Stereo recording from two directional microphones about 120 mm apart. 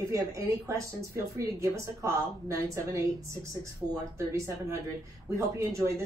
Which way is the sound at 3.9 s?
25° right (ahead or behind).